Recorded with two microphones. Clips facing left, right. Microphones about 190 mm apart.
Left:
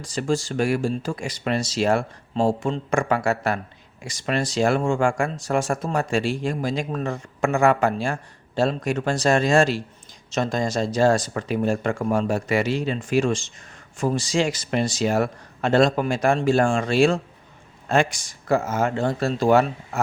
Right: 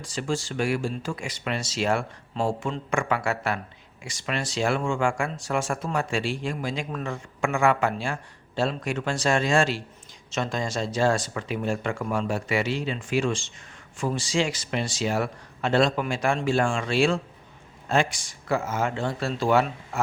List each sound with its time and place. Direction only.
0.0 s a man's voice: 40° left (ahead or behind)